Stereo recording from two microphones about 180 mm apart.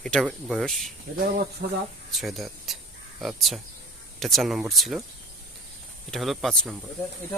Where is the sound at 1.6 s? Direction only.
65° right (ahead or behind).